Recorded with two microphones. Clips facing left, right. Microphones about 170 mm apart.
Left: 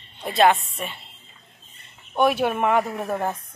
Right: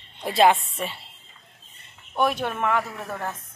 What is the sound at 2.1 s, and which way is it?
Speech, 5° left (ahead or behind).